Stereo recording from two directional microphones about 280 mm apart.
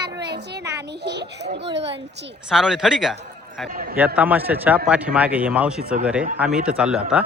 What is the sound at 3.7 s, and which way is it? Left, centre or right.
Speech, right.